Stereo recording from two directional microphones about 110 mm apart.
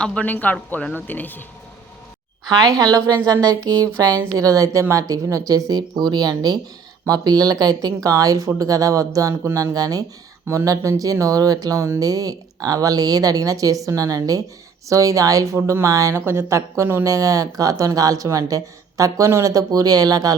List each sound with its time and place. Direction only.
0.0 s speech: 10° left (ahead or behind)
2.5 s speech: 35° right (ahead or behind)